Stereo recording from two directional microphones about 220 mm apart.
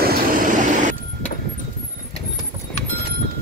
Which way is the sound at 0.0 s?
40° right (ahead or behind).